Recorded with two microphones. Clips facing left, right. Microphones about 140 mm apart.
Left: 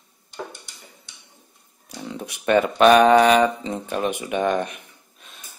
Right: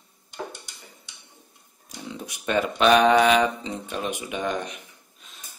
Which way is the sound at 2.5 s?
55° left (ahead or behind).